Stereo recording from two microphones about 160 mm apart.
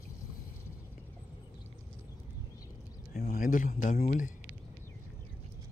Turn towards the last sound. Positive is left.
turn(degrees=55)  # may be behind; listen again after turning